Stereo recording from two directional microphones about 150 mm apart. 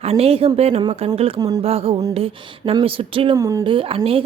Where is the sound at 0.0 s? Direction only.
45° right (ahead or behind).